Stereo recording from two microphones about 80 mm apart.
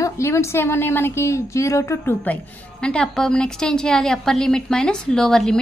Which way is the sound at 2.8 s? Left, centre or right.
Centre.